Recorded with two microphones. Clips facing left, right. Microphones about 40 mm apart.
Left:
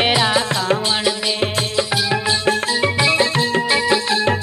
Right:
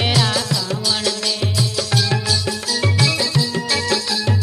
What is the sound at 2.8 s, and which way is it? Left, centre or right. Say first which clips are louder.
Music: even; left.